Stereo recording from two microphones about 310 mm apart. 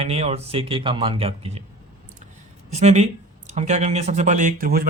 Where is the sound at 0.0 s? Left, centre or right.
Centre.